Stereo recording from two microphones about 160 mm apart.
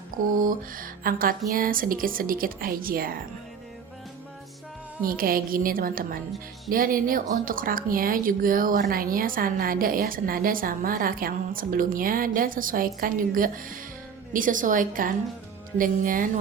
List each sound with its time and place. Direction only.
0.3 s speech: 60° right (ahead or behind)
5.0 s speech: 65° right (ahead or behind)